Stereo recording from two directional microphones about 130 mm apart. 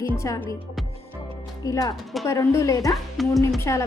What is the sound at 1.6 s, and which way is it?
A woman's voice, 30° left (ahead or behind).